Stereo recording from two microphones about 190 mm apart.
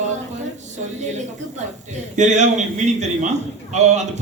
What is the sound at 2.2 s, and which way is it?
A man's voice, 40° right (ahead or behind).